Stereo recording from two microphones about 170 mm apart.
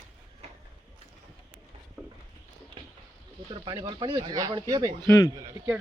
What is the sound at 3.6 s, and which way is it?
Speech, 30° right (ahead or behind).